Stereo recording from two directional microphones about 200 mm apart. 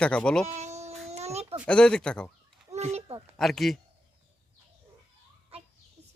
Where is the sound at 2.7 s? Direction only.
30° right (ahead or behind).